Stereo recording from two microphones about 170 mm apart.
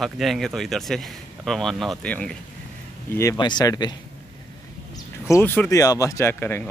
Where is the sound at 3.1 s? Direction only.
20° left (ahead or behind).